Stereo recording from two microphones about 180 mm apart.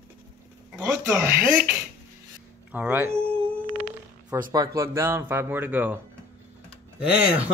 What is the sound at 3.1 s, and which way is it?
Speech, 30° right (ahead or behind).